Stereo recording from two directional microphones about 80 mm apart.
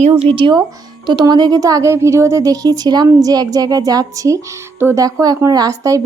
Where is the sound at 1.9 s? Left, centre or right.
Right.